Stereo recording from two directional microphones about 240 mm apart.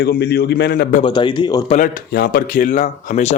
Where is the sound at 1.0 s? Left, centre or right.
Centre.